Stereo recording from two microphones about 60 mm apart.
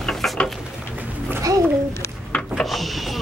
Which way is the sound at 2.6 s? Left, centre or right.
Centre.